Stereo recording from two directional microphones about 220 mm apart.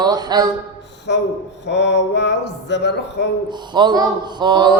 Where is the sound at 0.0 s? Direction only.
20° right (ahead or behind).